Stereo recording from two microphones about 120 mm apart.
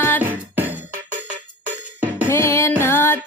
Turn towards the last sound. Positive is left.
turn(degrees=20)  # may be behind; listen again after turning